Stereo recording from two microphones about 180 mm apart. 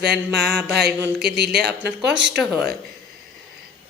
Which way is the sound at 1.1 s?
65° right (ahead or behind).